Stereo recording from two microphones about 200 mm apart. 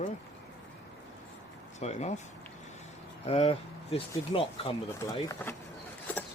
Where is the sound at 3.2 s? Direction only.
30° left (ahead or behind).